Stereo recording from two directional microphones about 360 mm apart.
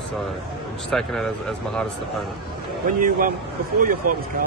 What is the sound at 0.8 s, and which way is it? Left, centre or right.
Speech, centre.